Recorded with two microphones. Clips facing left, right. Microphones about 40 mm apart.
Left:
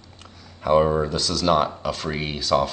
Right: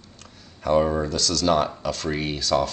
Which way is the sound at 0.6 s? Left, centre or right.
Centre.